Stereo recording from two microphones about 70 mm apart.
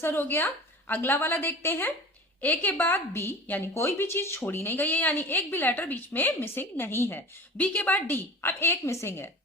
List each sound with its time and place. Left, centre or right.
0.0 s a woman's voice: left
7.6 s a woman's voice: left